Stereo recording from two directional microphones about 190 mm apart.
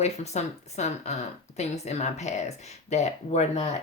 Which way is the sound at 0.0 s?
35° left (ahead or behind).